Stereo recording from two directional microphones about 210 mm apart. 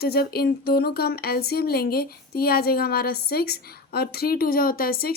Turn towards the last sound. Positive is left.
turn(degrees=45)  # may be behind; listen again after turning